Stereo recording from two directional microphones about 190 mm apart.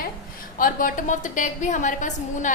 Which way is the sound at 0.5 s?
45° left (ahead or behind).